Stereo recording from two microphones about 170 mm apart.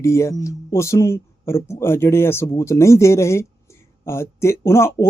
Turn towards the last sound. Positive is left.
turn(degrees=15)  # may be behind; listen again after turning